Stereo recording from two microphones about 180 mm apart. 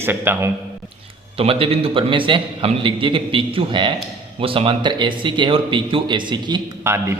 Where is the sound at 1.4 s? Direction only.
30° right (ahead or behind).